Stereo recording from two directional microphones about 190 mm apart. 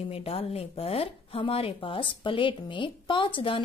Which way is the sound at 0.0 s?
30° left (ahead or behind).